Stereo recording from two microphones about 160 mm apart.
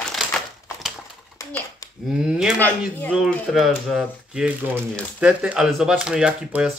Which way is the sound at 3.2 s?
Centre (ahead or behind).